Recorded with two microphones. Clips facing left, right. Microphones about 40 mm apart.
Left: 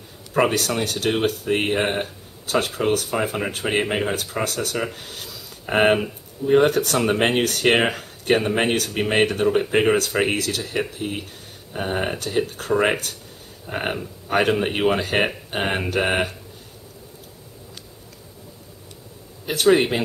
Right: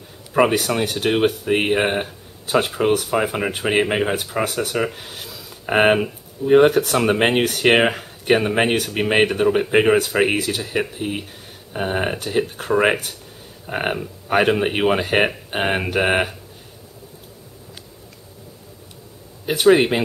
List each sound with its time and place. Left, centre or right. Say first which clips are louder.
0.4 s speech: right 3 dB; centre
19.4 s speech: right 3 dB; centre